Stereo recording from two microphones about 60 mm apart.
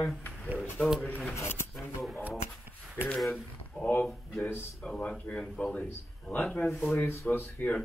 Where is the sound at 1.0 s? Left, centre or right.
Left.